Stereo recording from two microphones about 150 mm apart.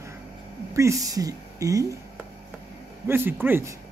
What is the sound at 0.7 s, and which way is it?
A woman's voice, 20° right (ahead or behind).